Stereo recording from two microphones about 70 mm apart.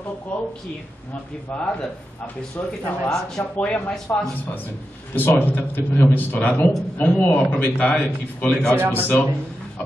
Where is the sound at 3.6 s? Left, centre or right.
Centre.